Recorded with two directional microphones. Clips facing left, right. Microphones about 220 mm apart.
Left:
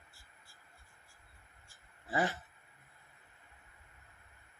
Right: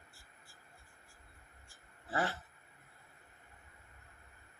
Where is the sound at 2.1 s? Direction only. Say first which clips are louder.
Left 2 dB; 15° left (ahead or behind).